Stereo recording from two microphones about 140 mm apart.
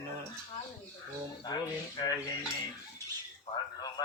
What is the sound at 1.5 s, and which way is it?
Speech, 30° left (ahead or behind).